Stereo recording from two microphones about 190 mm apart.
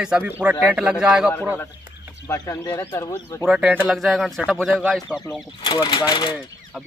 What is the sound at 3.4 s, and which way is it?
Speech, 5° right (ahead or behind).